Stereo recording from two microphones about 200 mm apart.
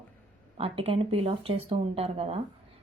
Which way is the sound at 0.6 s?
30° right (ahead or behind).